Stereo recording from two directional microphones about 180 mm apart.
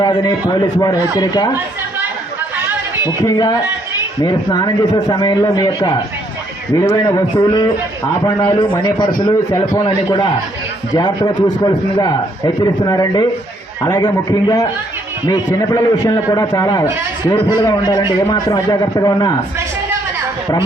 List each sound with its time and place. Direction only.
0.0 s a man's voice: 20° left (ahead or behind)
3.1 s a man's voice: 20° left (ahead or behind)